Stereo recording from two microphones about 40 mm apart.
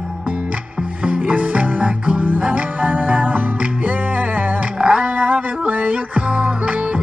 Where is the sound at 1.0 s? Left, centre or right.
Right.